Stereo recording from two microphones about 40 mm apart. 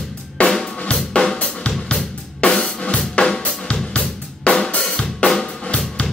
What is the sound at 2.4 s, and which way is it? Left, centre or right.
Drum kit, left.